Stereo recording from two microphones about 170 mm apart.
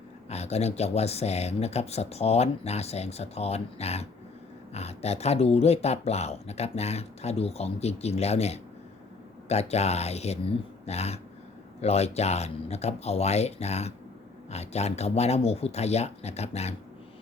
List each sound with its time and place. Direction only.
0.3 s speech: 40° left (ahead or behind)